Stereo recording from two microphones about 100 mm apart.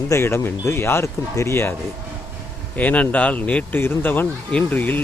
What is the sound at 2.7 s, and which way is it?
A man's voice, 15° left (ahead or behind).